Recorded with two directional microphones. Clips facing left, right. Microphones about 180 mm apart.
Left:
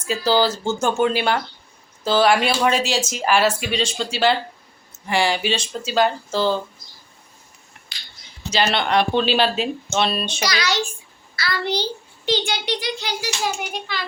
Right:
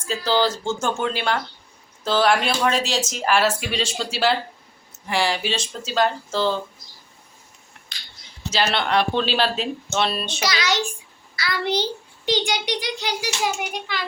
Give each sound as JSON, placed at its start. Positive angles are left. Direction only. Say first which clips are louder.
{"t": 0.0, "sound": "speech", "louder": "left 2 dB", "side_deg": 10}
{"t": 7.9, "sound": "a sound", "louder": "even", "side_deg": 5}
{"t": 8.4, "sound": "speech", "louder": "left 2 dB", "side_deg": 0}
{"t": 10.4, "sound": "a child's voice", "louder": "right 1 dB", "side_deg": -20}